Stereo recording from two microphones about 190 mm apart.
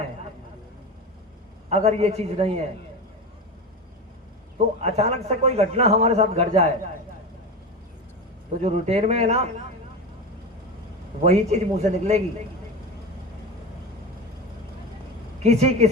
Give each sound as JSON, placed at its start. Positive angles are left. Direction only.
{"t": 1.7, "sound": "a man's voice", "side_deg": -35}
{"t": 4.5, "sound": "a man's voice", "side_deg": -35}
{"t": 8.5, "sound": "a man's voice", "side_deg": -35}
{"t": 11.3, "sound": "a man's voice", "side_deg": -35}
{"t": 15.4, "sound": "a man's voice", "side_deg": -35}